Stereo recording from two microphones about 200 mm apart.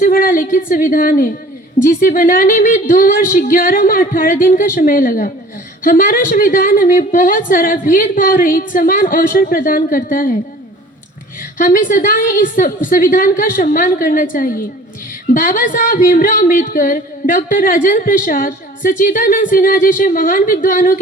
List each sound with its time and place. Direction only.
0.0 s a woman's voice: 45° left (ahead or behind)
11.5 s a woman's voice: 40° left (ahead or behind)